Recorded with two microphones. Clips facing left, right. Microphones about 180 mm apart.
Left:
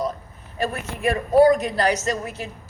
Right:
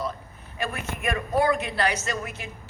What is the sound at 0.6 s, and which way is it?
A man's voice, 40° left (ahead or behind).